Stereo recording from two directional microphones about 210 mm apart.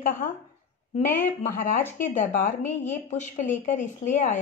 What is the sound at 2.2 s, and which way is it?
Speech, 10° left (ahead or behind).